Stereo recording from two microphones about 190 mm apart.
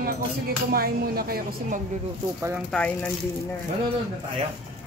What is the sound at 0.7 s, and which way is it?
Speech, 50° right (ahead or behind).